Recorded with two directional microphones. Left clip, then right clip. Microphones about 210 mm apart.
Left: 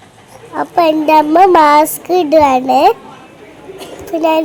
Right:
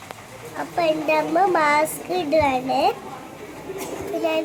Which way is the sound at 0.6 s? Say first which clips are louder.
Left 10 dB; 40° left (ahead or behind).